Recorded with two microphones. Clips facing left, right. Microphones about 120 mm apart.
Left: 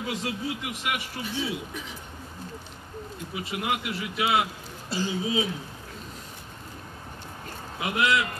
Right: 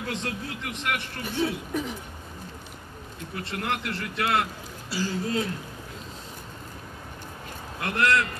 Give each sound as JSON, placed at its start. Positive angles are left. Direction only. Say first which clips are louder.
{"t": 0.0, "sound": "speech", "louder": "left 1 dB", "side_deg": 5}
{"t": 1.2, "sound": "speech", "louder": "right 6 dB", "side_deg": -55}
{"t": 3.3, "sound": "speech", "louder": "left 1 dB", "side_deg": 5}
{"t": 4.8, "sound": "speech", "louder": "even", "side_deg": 20}
{"t": 5.1, "sound": "speech", "louder": "left 1 dB", "side_deg": 5}
{"t": 7.8, "sound": "speech", "louder": "right 1 dB", "side_deg": 5}